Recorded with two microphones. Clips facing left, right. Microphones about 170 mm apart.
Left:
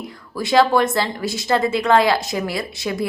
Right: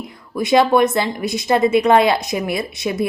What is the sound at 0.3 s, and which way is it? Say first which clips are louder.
A woman's voice: right 2 dB; 20° right (ahead or behind).